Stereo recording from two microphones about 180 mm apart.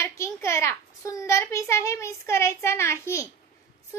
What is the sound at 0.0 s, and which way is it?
A child's voice, 15° left (ahead or behind).